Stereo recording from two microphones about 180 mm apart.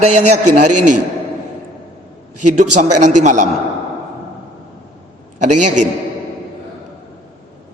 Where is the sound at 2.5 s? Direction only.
40° right (ahead or behind).